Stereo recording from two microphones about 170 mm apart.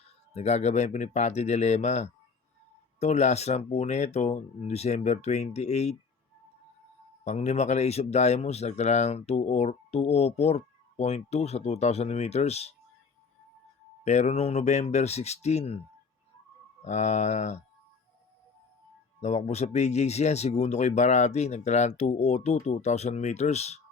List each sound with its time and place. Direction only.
0.3 s speech: 40° left (ahead or behind)
7.3 s speech: 40° left (ahead or behind)
14.0 s speech: 40° left (ahead or behind)
16.8 s speech: 45° left (ahead or behind)
19.2 s speech: 40° left (ahead or behind)